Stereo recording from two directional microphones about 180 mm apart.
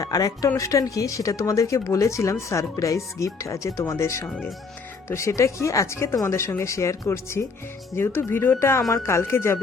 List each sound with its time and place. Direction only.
0.0 s a woman's voice: 20° left (ahead or behind)
4.3 s speech: centre (ahead or behind)
5.0 s a woman's voice: 15° left (ahead or behind)